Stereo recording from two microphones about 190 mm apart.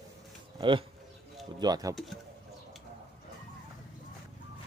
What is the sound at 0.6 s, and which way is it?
Speech, 25° right (ahead or behind).